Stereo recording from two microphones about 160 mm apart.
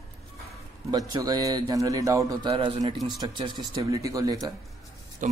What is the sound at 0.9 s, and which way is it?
Speech, 25° right (ahead or behind).